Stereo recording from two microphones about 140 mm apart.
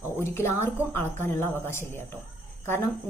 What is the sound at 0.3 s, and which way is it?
A woman's voice, 15° left (ahead or behind).